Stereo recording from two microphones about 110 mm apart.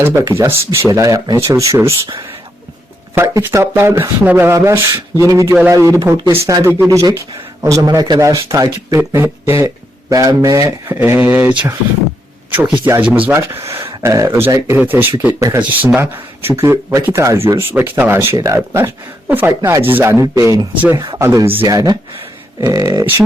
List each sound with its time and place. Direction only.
0.0 s speech: 25° right (ahead or behind)
3.2 s a man's voice: 25° right (ahead or behind)
12.6 s a man's voice: 10° right (ahead or behind); by 21.2 s 35° right (ahead or behind)
21.2 s speech: 20° right (ahead or behind)
21.7 s a man's voice: 35° right (ahead or behind)